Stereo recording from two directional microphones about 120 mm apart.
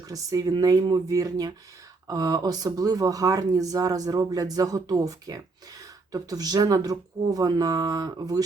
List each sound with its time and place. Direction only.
0.1 s speech: 30° right (ahead or behind)